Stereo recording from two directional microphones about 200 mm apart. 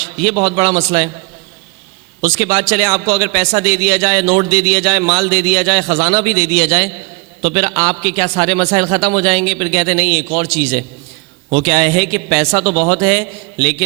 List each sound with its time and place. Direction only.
0.0 s a sound: 5° left (ahead or behind)
0.3 s speech: 25° right (ahead or behind)
0.8 s a man's voice: 5° left (ahead or behind)
2.2 s a man's voice: 5° left (ahead or behind)
12.5 s speech: 25° right (ahead or behind)
13.0 s a man's voice: 5° left (ahead or behind)